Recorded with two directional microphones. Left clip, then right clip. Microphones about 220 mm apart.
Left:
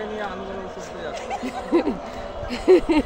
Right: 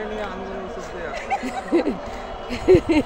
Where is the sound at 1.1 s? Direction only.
35° right (ahead or behind).